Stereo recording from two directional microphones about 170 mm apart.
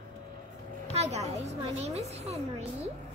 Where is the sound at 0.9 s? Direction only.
40° right (ahead or behind).